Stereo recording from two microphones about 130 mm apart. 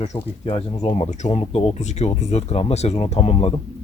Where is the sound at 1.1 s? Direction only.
60° left (ahead or behind).